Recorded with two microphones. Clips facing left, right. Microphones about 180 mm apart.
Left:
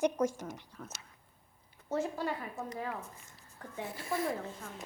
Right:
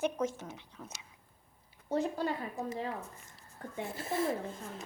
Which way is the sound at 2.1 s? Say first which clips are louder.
Right 2 dB; 35° right (ahead or behind).